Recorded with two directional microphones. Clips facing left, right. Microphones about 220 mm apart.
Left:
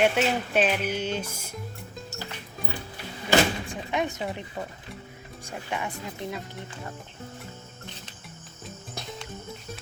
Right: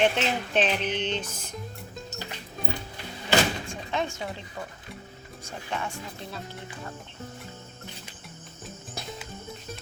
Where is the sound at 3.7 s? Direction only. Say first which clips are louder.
Left 2 dB; 15° left (ahead or behind).